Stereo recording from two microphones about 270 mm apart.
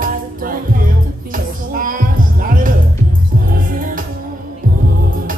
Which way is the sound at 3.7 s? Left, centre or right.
Right.